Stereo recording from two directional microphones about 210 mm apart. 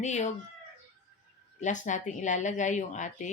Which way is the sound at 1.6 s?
35° left (ahead or behind).